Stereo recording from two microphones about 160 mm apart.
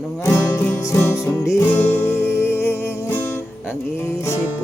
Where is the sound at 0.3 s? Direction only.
15° left (ahead or behind).